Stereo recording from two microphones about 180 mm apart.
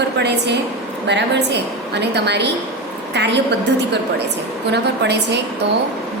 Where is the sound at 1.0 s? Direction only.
75° right (ahead or behind).